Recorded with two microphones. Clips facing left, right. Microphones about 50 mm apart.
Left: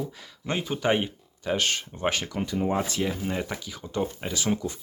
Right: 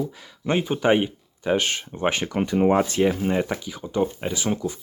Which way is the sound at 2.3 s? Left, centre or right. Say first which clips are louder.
Right 7 dB; right.